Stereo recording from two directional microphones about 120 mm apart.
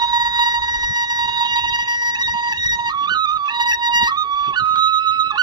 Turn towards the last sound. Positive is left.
turn(degrees=-40)  # may be behind; listen again after turning